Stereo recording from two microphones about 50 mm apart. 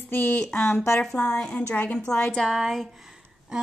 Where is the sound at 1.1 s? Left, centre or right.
Centre.